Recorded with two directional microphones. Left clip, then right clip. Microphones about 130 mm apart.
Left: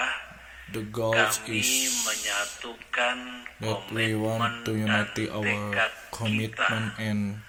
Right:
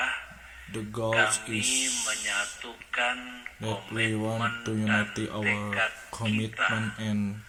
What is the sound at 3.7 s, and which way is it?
Speech, 40° left (ahead or behind).